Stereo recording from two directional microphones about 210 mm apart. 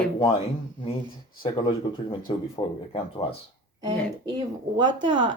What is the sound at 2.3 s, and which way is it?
Speech, 20° left (ahead or behind).